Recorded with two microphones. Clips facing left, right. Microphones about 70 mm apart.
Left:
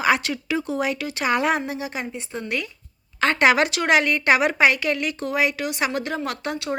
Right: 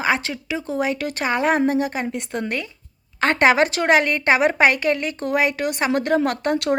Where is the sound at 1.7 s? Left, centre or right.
Right.